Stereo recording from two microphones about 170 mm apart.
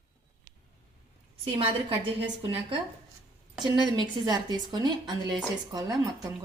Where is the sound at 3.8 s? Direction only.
25° right (ahead or behind).